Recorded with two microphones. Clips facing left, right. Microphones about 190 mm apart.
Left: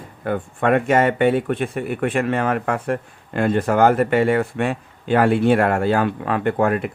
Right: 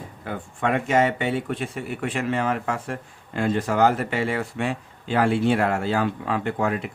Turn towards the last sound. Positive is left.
turn(degrees=55)  # may be behind; listen again after turning